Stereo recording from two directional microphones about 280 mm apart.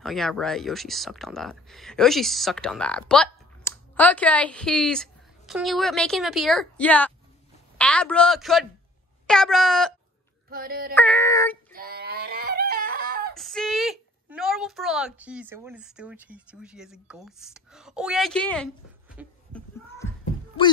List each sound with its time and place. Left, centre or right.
0.0 s speech: centre
10.5 s child singing: right
11.0 s child singing: centre
11.7 s a sound: right
13.4 s speech: centre